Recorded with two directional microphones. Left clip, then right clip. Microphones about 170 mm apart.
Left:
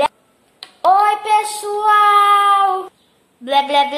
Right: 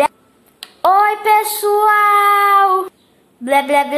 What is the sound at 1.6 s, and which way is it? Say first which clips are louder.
Child singing: right 1 dB; 20° right (ahead or behind).